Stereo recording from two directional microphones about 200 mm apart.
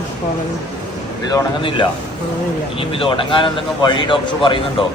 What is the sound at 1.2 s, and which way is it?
A man's voice, 20° left (ahead or behind).